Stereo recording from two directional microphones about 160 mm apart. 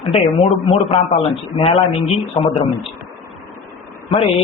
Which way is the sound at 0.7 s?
35° left (ahead or behind).